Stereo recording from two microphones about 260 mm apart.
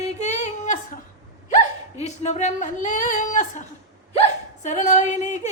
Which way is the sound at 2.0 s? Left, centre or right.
Left.